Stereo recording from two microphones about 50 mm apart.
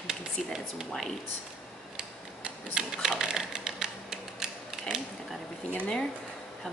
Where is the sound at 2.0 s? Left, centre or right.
Centre.